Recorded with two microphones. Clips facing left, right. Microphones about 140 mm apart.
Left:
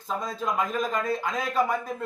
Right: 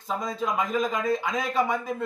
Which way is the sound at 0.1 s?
Centre (ahead or behind).